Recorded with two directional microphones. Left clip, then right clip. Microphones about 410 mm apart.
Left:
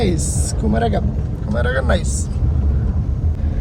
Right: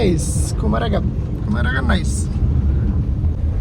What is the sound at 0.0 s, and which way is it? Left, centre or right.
A woman's voice, centre.